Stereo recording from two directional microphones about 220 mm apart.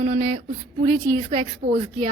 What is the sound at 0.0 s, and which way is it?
Speech, 30° right (ahead or behind).